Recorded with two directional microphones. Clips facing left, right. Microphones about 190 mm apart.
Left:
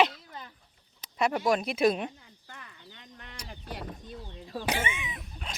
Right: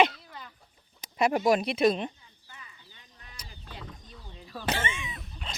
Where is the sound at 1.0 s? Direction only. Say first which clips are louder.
Right 3 dB; 10° right (ahead or behind).